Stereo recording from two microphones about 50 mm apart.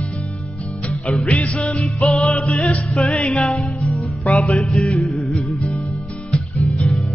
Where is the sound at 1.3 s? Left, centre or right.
Left.